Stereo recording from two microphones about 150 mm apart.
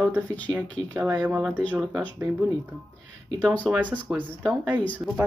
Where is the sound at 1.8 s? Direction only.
5° left (ahead or behind).